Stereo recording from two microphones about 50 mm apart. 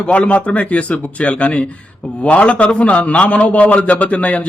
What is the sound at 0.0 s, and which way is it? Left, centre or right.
Speech, left.